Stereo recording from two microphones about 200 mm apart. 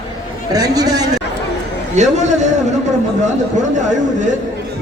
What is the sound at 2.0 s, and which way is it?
Speech, 35° right (ahead or behind).